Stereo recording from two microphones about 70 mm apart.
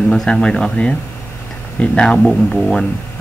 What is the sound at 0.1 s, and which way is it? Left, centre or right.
Speech, centre.